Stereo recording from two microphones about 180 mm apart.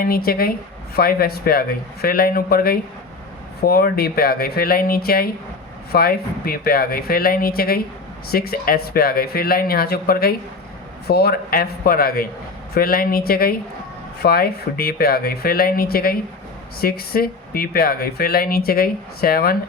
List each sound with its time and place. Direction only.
0.0 s speech: 55° left (ahead or behind)